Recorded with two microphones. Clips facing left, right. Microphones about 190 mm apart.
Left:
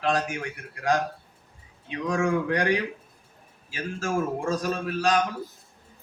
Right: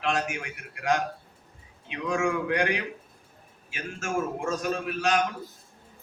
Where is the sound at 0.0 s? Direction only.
35° left (ahead or behind).